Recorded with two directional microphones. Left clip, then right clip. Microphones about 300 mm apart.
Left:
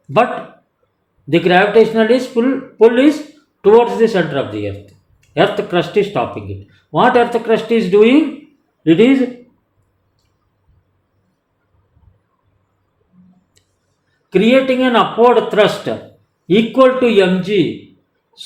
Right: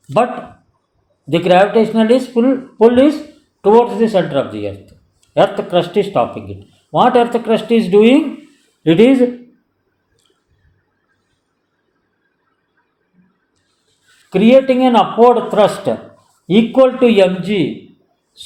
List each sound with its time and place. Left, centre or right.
1.3 s speech: centre
14.3 s speech: centre